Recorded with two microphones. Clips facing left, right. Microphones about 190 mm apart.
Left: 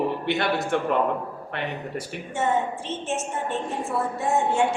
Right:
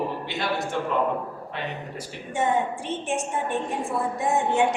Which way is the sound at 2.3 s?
15° right (ahead or behind).